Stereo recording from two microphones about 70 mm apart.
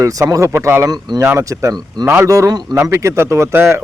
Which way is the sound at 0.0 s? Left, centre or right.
Right.